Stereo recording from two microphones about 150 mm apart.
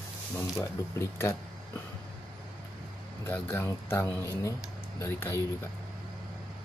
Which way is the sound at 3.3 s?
15° left (ahead or behind).